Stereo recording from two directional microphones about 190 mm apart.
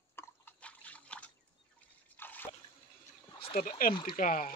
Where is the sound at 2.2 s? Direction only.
10° left (ahead or behind).